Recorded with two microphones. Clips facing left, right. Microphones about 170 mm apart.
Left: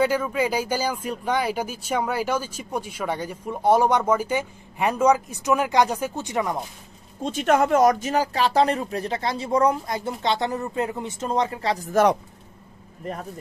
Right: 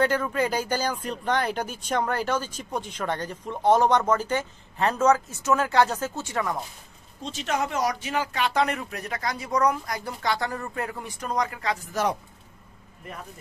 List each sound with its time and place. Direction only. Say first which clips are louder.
0.0 s speech: left 2 dB; 5° left (ahead or behind)
7.2 s speech: left 8 dB; 50° left (ahead or behind); by 11.9 s 35° left (ahead or behind)
13.0 s speech: left 8 dB; 40° left (ahead or behind)